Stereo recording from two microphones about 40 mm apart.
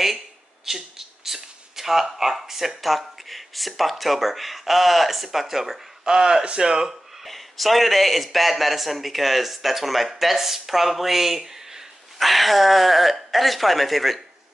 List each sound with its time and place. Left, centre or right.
0.7 s a sound: centre
2.8 s a man's voice: centre
6.0 s speech: centre
7.2 s a man's voice: centre
12.2 s a man's voice: centre